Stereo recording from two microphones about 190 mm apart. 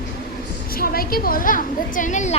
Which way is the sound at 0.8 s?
50° left (ahead or behind).